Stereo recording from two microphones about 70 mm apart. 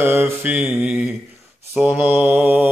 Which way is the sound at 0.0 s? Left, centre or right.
Right.